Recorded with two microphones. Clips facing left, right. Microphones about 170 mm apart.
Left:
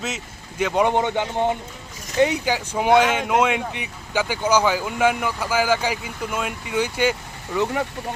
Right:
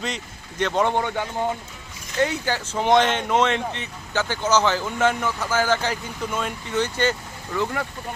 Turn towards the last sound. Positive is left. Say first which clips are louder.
# left 3 dB
turn(degrees=20)  # may be behind; listen again after turning